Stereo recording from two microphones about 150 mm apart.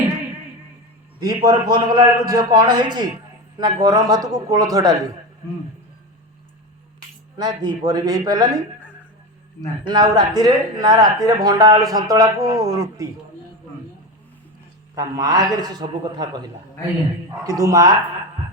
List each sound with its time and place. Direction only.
1.2 s a man's voice: 25° right (ahead or behind)
7.3 s a man's voice: 30° right (ahead or behind)
9.8 s a man's voice: 30° right (ahead or behind)
14.9 s a man's voice: 25° right (ahead or behind)
17.4 s a man's voice: 25° right (ahead or behind)